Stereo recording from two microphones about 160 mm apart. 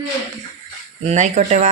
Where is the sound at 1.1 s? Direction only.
50° right (ahead or behind).